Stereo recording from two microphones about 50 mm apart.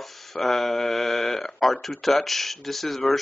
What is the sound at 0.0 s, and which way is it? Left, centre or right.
Speech, centre.